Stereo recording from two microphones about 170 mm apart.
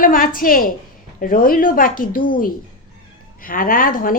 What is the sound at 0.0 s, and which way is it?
A woman's voice, 55° left (ahead or behind).